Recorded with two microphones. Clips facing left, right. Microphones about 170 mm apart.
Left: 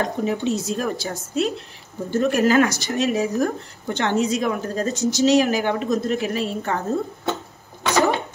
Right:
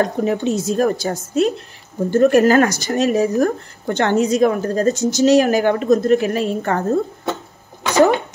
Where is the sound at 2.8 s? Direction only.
40° right (ahead or behind).